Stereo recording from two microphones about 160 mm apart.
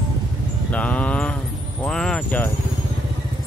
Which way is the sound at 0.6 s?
10° left (ahead or behind).